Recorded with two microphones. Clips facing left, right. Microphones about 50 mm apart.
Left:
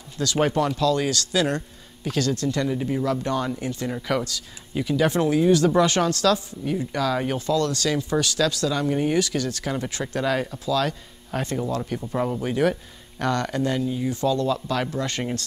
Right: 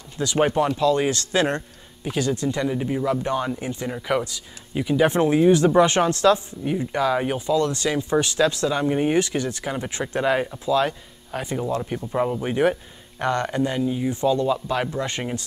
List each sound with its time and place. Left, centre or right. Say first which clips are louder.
0.2 s speech: right 2 dB; centre
2.0 s speech: right 1 dB; centre
11.3 s speech: right 1 dB; centre